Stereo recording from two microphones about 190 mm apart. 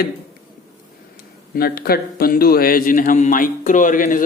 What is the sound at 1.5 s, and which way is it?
A man's voice, 55° left (ahead or behind).